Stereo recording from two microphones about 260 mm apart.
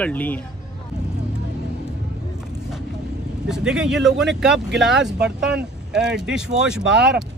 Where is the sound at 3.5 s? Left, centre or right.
Centre.